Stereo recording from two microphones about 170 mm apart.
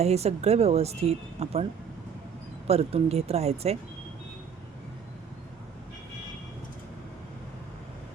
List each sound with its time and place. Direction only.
0.0 s speech: 40° right (ahead or behind)
2.6 s speech: 35° right (ahead or behind)